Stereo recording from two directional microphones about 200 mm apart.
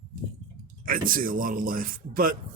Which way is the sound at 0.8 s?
45° right (ahead or behind).